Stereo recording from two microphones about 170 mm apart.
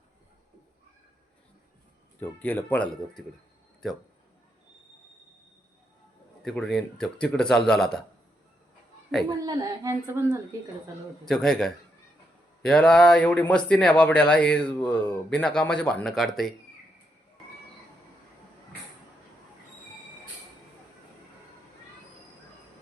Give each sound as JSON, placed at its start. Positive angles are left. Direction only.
{"t": 2.4, "sound": "speech", "side_deg": 10}
{"t": 6.4, "sound": "a man's voice", "side_deg": 0}
{"t": 9.4, "sound": "speech", "side_deg": -20}
{"t": 11.3, "sound": "a man's voice", "side_deg": 0}